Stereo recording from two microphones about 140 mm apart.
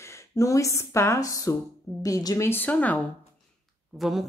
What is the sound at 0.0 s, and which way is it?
Speech, 20° left (ahead or behind).